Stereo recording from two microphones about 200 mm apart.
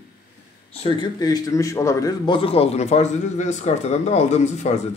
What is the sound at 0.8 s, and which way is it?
A man's voice, 20° left (ahead or behind).